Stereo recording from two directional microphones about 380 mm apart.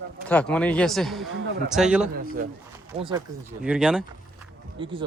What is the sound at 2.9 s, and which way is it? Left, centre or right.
Speech, centre.